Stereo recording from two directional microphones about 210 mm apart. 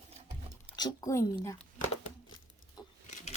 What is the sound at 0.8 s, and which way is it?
Speech, 15° left (ahead or behind).